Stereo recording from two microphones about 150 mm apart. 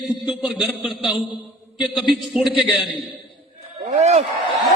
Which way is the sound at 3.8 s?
50° right (ahead or behind).